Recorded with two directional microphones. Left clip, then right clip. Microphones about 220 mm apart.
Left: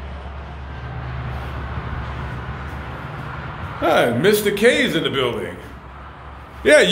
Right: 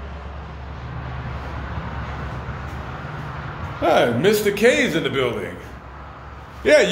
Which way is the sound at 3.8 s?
10° left (ahead or behind).